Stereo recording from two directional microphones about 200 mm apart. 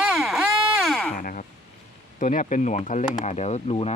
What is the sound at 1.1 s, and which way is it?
Speech, 40° left (ahead or behind).